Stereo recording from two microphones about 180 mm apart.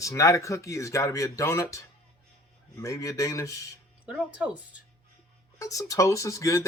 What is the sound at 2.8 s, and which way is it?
Speech, 20° left (ahead or behind).